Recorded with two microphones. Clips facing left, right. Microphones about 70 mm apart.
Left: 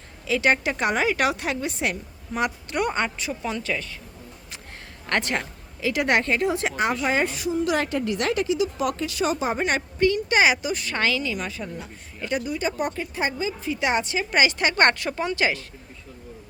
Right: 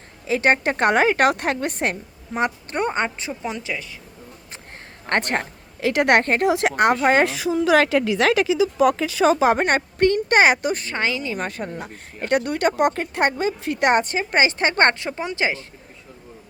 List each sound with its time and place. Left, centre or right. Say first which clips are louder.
0.3 s speech: right 3 dB; right
2.3 s a woman's voice: right 2 dB; right
5.0 s a woman's voice: right 3 dB; right
5.9 s a woman's voice: right 5 dB; right
6.5 s a woman's voice: right 6 dB; right
7.1 s a woman's voice: right 5 dB; right
9.6 s speech: right 3 dB; right
10.8 s a woman's voice: even; right
11.3 s speech: right 4 dB; right